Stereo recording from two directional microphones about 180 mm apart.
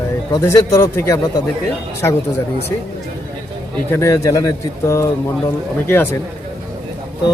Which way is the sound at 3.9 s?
15° left (ahead or behind).